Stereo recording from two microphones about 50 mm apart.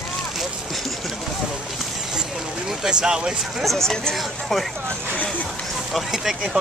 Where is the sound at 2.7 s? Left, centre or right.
Centre.